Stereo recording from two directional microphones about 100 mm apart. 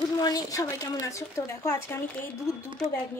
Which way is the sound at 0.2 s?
35° left (ahead or behind).